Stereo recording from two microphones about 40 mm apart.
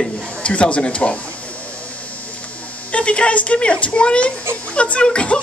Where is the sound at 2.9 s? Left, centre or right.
Left.